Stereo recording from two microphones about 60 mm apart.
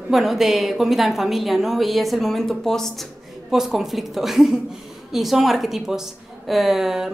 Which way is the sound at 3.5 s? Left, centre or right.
Centre.